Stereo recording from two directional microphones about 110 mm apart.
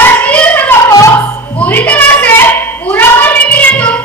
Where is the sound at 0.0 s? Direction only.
15° left (ahead or behind).